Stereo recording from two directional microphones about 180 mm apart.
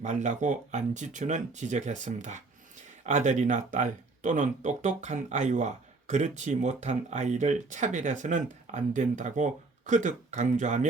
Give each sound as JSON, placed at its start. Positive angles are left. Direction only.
{"t": 0.0, "sound": "speech", "side_deg": -40}